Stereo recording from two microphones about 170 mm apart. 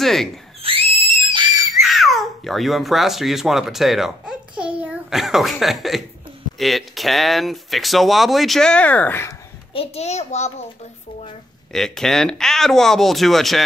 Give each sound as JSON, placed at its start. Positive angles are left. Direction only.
{"t": 0.0, "sound": "speech", "side_deg": 0}
{"t": 0.6, "sound": "screaming", "side_deg": -35}
{"t": 1.8, "sound": "a child's voice", "side_deg": 0}
{"t": 9.9, "sound": "a child's voice", "side_deg": 40}
{"t": 11.7, "sound": "speech", "side_deg": 0}